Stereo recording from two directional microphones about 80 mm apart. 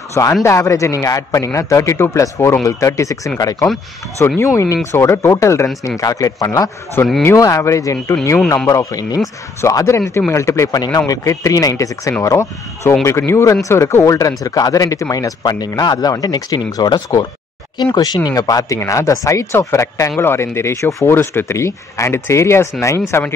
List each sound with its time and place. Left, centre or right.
0.1 s speech: left
4.2 s speech: left
7.0 s speech: left
7.3 s speech: left
10.7 s speech: left
11.0 s speech: left
18.2 s speech: left
18.8 s speech: left